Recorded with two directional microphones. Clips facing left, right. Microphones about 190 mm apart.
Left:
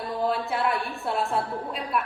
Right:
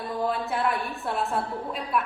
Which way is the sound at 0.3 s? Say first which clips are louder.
Left 1 dB; centre (ahead or behind).